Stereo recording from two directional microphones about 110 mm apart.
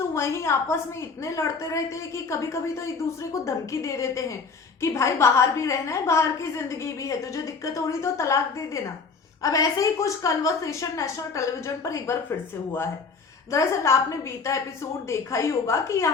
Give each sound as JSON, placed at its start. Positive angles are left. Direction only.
{"t": 0.1, "sound": "a woman's voice", "side_deg": 25}
{"t": 13.5, "sound": "a woman's voice", "side_deg": 25}